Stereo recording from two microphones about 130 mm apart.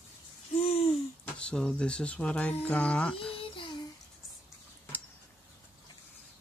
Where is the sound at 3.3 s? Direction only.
45° left (ahead or behind).